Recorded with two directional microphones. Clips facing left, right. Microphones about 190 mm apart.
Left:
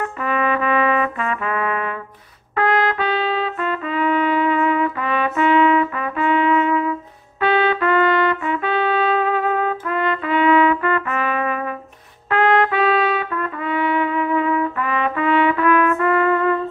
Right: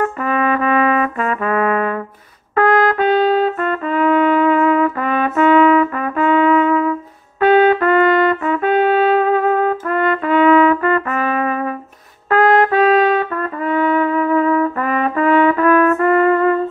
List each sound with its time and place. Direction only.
0.2 s brass instrument: 45° right (ahead or behind)
2.5 s trumpet: 45° right (ahead or behind)